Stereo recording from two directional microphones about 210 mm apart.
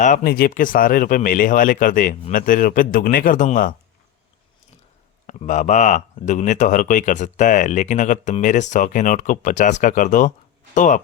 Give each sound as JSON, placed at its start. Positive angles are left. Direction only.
{"t": 0.0, "sound": "speech", "side_deg": 40}
{"t": 5.2, "sound": "speech", "side_deg": 35}